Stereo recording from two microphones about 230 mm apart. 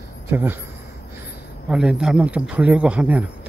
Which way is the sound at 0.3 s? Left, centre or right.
Centre.